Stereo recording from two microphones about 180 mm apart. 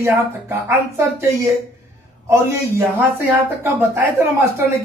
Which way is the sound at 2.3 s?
15° right (ahead or behind).